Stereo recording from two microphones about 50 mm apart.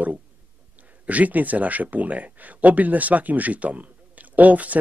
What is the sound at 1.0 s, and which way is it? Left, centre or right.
Speech, right.